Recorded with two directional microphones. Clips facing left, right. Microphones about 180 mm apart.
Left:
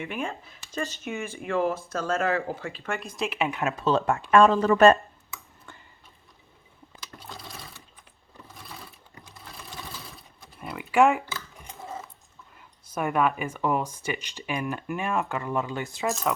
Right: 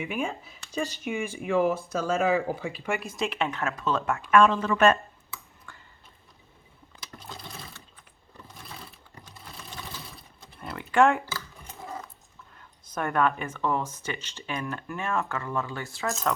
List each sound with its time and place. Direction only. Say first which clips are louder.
0.0 s speech: right 1 dB; 5° right (ahead or behind)
3.8 s speech: left 5 dB; 30° left (ahead or behind)
5.7 s a sound: left 2 dB; 25° left (ahead or behind)
10.6 s a sound: left 1 dB; 5° left (ahead or behind)
12.8 s speech: left 1 dB; 10° left (ahead or behind)
16.3 s speech: even; 5° left (ahead or behind)